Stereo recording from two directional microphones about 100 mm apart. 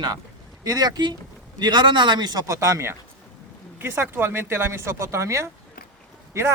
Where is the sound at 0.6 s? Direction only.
40° right (ahead or behind).